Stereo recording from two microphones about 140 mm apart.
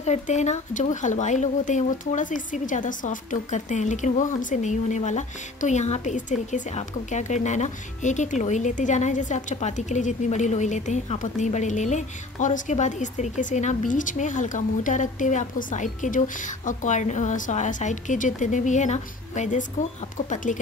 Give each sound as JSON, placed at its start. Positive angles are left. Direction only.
{"t": 0.0, "sound": "speech", "side_deg": 55}